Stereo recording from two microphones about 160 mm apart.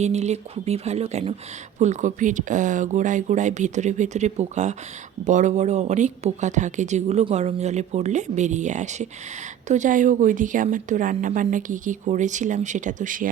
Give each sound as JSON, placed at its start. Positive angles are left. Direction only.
{"t": 0.0, "sound": "speech", "side_deg": -45}